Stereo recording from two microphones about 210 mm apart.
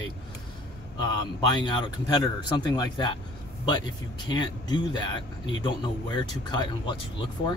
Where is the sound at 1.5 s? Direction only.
20° left (ahead or behind).